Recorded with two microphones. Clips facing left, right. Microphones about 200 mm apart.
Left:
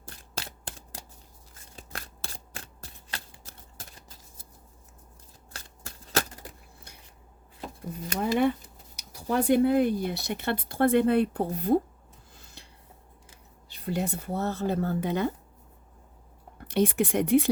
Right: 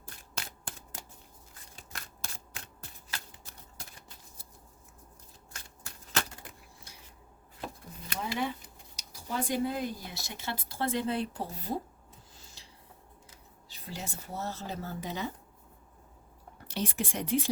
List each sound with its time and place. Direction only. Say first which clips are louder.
0.3 s scissors: left 4 dB; 35° left (ahead or behind)
1.7 s a sound: left 6 dB; 35° left (ahead or behind)
8.0 s a sound: left 9 dB; 50° left (ahead or behind)
9.3 s speech: left 10 dB; 60° left (ahead or behind)
12.4 s rub: left 4 dB; 60° left (ahead or behind)
13.8 s speech: left 12 dB; 60° left (ahead or behind)
16.6 s speech: left 10 dB; 55° left (ahead or behind)